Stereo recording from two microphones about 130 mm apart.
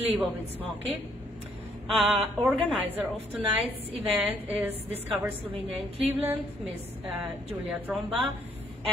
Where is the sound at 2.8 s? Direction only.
10° right (ahead or behind).